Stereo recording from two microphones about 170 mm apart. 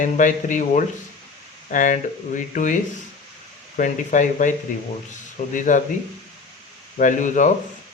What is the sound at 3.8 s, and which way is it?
Speech, 50° left (ahead or behind).